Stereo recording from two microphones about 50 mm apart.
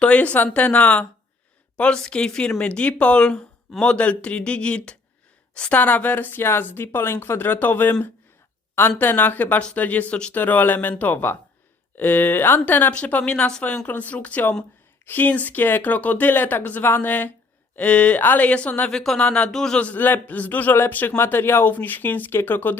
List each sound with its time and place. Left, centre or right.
0.0 s speech: left
9.0 s speech: left
13.2 s speech: centre
18.9 s speech: centre
19.7 s speech: left
21.0 s speech: left
21.3 s speech: left